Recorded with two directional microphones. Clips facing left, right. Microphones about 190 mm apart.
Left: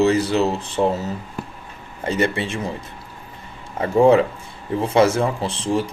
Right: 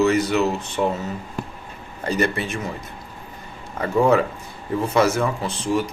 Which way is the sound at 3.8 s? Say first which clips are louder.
Left 4 dB; 30° left (ahead or behind).